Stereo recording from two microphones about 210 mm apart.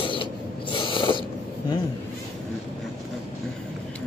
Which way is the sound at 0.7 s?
25° left (ahead or behind).